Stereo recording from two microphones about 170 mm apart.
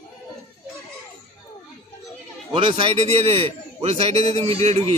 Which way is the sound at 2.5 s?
30° right (ahead or behind).